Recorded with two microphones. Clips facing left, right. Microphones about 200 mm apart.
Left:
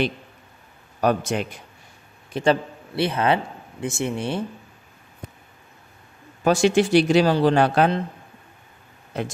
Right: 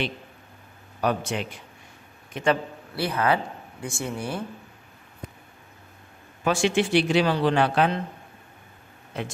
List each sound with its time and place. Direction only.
1.0 s a man's voice: 40° left (ahead or behind)
2.3 s a man's voice: 30° left (ahead or behind)
6.4 s speech: 40° left (ahead or behind)
9.1 s speech: 40° left (ahead or behind)